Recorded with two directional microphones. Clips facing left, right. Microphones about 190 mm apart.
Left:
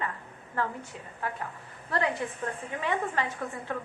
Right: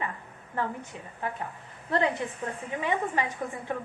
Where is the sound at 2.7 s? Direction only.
15° right (ahead or behind).